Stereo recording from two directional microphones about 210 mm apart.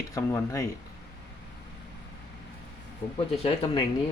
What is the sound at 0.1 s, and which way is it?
Speech, 15° left (ahead or behind).